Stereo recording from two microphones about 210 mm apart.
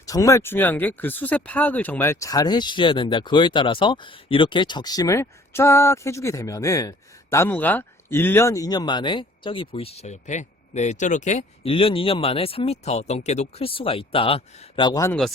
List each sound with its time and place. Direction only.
0.0 s speech: 15° left (ahead or behind)